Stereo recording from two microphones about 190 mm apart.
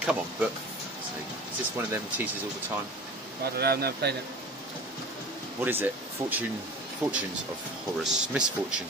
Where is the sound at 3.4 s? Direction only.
55° right (ahead or behind).